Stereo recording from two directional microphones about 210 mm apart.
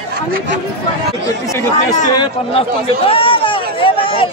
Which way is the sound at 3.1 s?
25° left (ahead or behind).